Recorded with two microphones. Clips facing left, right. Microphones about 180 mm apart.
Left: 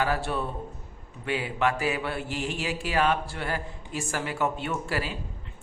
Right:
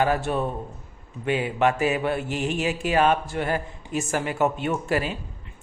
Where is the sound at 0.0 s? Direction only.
20° right (ahead or behind).